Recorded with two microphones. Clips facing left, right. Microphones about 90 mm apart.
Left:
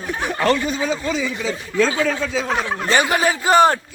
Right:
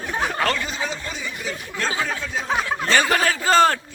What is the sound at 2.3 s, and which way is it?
Speech, 90° left.